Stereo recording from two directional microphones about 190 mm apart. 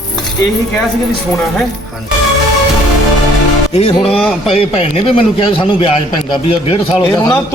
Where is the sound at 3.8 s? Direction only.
30° left (ahead or behind).